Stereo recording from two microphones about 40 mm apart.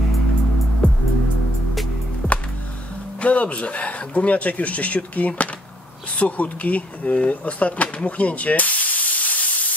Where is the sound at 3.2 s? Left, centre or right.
Left.